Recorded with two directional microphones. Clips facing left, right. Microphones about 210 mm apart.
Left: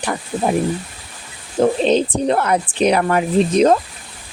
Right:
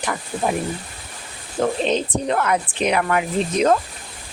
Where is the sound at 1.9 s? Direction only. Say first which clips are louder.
Left 5 dB; 35° left (ahead or behind).